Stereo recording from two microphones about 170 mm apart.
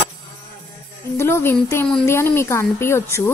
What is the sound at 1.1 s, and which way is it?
A woman's voice, 15° left (ahead or behind).